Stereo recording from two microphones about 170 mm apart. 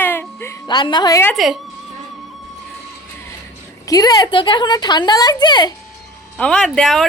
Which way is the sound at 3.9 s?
20° left (ahead or behind).